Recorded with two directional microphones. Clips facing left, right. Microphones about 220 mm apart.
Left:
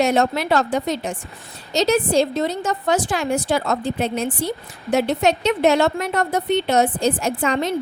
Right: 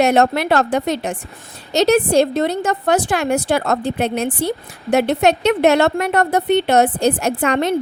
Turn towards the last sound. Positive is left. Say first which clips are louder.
# right 3 dB
turn(degrees=-65)  # may be behind; listen again after turning